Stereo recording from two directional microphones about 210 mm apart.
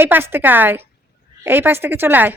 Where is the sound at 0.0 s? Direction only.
10° right (ahead or behind).